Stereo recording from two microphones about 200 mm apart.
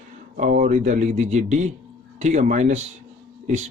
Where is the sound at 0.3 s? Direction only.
40° right (ahead or behind).